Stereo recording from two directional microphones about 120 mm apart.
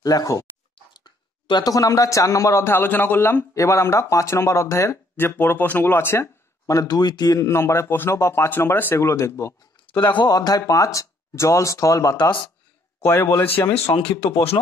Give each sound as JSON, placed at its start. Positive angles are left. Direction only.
{"t": 0.0, "sound": "a man's voice", "side_deg": 30}
{"t": 10.1, "sound": "a man's voice", "side_deg": 35}
{"t": 13.9, "sound": "speech", "side_deg": 50}